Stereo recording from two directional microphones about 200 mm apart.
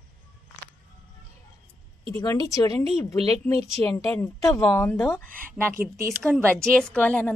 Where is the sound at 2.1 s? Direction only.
20° left (ahead or behind).